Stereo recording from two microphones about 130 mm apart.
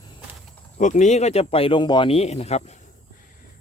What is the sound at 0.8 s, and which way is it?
Speech, 70° left (ahead or behind).